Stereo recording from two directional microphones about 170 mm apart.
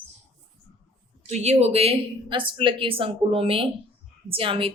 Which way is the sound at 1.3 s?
40° right (ahead or behind).